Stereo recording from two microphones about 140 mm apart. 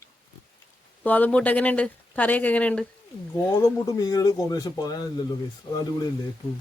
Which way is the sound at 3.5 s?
20° left (ahead or behind).